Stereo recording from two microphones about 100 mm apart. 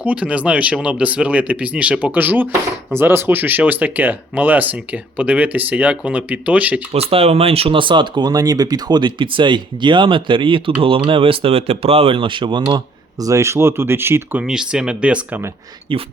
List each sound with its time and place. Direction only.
0.0 s speech: 15° right (ahead or behind)
6.9 s speech: 80° right; by 12.8 s 45° right (ahead or behind)
13.2 s speech: 30° right (ahead or behind)
14.4 s speech: 5° right (ahead or behind)